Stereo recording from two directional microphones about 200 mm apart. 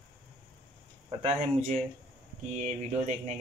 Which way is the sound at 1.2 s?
35° right (ahead or behind).